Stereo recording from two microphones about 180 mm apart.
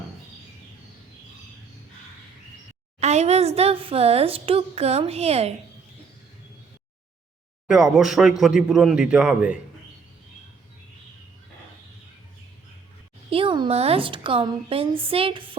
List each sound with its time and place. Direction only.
3.0 s a woman's voice: 40° right (ahead or behind)
7.7 s a man's voice: centre (ahead or behind)
13.3 s a woman's voice: 30° right (ahead or behind)